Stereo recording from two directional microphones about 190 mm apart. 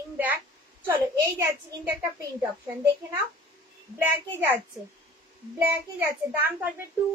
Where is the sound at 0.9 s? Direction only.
15° right (ahead or behind).